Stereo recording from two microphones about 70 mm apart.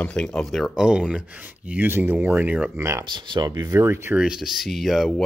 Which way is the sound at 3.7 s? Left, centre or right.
Right.